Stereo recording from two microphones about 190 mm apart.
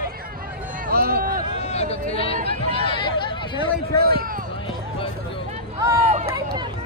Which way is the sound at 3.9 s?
55° right (ahead or behind).